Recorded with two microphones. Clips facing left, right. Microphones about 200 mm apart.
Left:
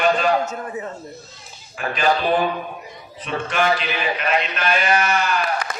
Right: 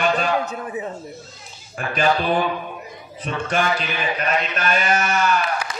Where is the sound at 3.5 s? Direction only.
40° right (ahead or behind).